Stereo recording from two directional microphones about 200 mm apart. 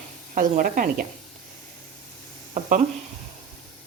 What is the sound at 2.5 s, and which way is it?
Speech, 40° right (ahead or behind).